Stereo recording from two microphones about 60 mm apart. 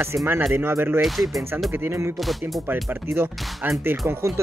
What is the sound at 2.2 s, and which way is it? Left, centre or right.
Speech, centre.